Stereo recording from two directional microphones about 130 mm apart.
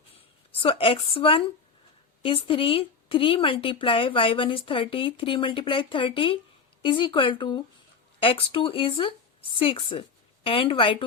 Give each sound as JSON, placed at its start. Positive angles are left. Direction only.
{"t": 0.6, "sound": "a woman's voice", "side_deg": 45}